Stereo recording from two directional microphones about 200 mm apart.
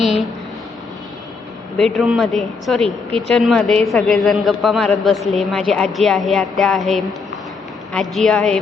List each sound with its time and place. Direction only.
1.8 s a woman's voice: centre (ahead or behind)